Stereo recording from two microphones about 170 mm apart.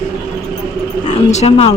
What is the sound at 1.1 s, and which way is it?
Speech, 40° left (ahead or behind).